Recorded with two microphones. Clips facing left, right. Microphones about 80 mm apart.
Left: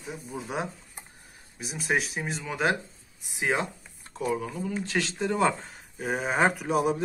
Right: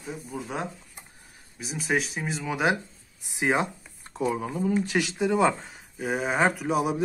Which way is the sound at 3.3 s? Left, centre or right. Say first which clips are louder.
Right 3 dB; right.